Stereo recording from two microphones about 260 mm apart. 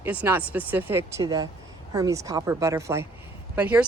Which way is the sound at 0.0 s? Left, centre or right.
Centre.